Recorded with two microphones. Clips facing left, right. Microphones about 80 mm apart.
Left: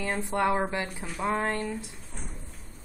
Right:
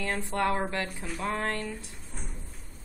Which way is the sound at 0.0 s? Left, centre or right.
Centre.